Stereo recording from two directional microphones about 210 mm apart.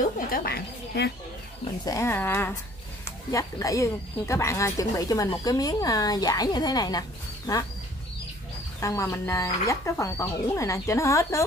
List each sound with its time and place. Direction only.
0.0 s speech: 45° left (ahead or behind)
1.9 s speech: 15° left (ahead or behind)
8.7 s speech: 15° left (ahead or behind)